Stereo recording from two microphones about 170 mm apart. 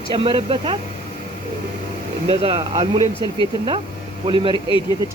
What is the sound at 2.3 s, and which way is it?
Speech, 35° right (ahead or behind).